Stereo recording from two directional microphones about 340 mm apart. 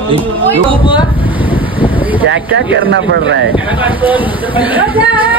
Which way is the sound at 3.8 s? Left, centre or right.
Centre.